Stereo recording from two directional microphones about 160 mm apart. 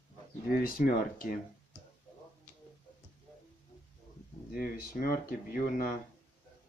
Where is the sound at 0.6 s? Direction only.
65° left (ahead or behind).